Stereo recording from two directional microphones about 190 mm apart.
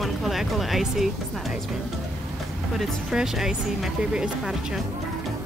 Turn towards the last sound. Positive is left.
turn(degrees=-5)  # may be behind; listen again after turning